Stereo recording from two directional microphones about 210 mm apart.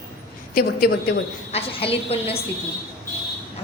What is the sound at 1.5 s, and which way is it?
Speech, 30° left (ahead or behind).